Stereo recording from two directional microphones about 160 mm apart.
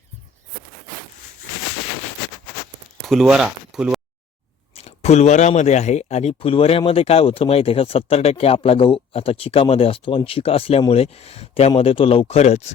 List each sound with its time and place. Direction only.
3.0 s speech: centre (ahead or behind)
4.7 s speech: 40° left (ahead or behind)